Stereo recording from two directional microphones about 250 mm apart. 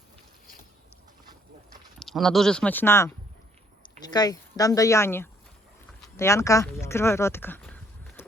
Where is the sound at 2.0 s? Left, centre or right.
Centre.